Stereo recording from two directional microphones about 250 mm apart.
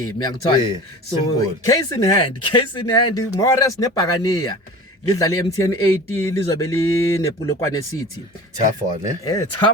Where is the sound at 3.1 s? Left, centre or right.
Centre.